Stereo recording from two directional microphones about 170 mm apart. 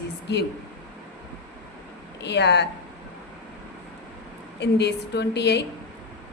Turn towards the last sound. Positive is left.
turn(degrees=85)